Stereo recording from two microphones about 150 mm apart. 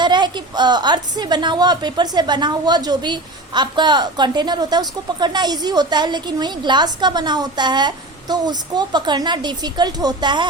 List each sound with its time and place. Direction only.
0.0 s a woman's voice: 30° right (ahead or behind)